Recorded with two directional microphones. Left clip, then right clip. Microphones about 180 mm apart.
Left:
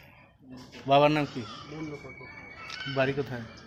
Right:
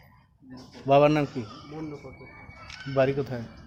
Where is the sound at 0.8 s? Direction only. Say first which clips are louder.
Right 2 dB; 55° right (ahead or behind).